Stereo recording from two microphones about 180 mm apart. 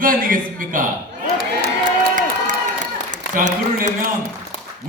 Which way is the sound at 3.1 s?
45° right (ahead or behind).